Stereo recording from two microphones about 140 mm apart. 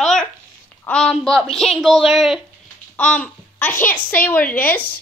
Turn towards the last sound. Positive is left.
turn(degrees=10)  # may be behind; listen again after turning